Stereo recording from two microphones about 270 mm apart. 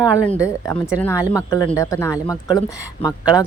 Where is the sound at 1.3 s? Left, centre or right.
Centre.